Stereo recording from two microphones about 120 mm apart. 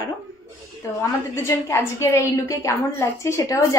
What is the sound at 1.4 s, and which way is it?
A woman's voice, 25° left (ahead or behind).